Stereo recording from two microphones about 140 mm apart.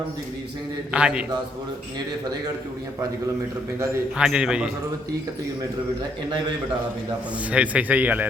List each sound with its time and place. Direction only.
0.9 s speech: 5° right (ahead or behind)
4.2 s a man's voice: 5° right (ahead or behind)
7.5 s speech: 10° right (ahead or behind)